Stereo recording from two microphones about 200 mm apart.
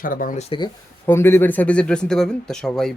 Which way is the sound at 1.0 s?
10° left (ahead or behind).